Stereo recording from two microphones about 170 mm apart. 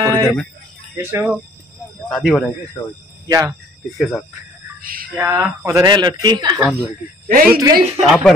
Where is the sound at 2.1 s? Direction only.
Centre (ahead or behind).